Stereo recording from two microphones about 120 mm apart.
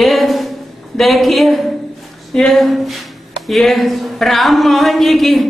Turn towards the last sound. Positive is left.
turn(degrees=0)  # may be behind; listen again after turning